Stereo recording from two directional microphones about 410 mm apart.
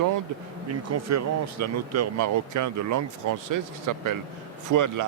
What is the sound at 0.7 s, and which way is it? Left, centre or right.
Speech, right.